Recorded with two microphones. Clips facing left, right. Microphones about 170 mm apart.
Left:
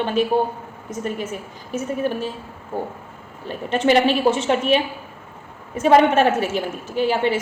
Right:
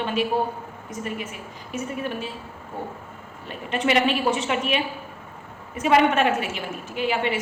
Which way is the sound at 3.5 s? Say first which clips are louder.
Left 5 dB; 35° left (ahead or behind).